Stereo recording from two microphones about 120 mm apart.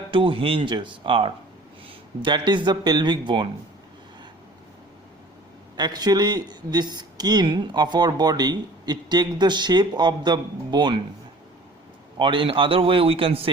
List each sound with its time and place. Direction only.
0.1 s a man's voice: 45° right (ahead or behind)
5.7 s speech: 35° right (ahead or behind)
12.2 s a man's voice: 45° right (ahead or behind)